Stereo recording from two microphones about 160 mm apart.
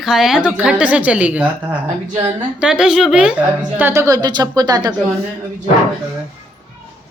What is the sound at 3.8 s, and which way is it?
Speech, 15° right (ahead or behind).